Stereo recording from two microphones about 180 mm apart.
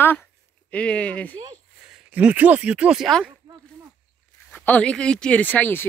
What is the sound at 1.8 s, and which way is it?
Speech, 5° right (ahead or behind).